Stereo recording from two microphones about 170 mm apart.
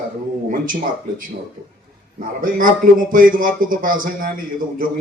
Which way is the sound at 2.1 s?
55° right (ahead or behind).